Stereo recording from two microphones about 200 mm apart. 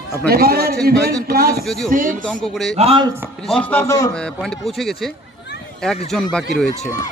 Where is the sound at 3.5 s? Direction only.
10° left (ahead or behind).